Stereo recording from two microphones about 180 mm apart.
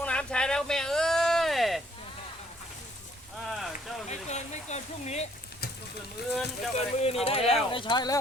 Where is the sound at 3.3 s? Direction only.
Centre (ahead or behind).